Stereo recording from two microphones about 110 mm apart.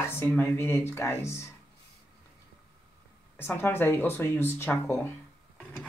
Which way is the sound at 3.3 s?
20° left (ahead or behind).